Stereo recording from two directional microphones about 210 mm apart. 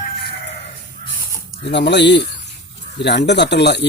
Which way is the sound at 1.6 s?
55° left (ahead or behind).